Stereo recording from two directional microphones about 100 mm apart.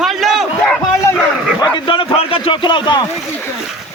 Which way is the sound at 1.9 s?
70° left (ahead or behind).